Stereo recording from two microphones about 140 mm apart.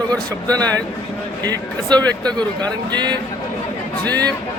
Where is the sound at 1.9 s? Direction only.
30° right (ahead or behind).